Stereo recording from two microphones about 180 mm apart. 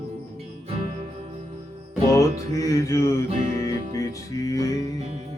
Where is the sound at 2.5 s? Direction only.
20° left (ahead or behind).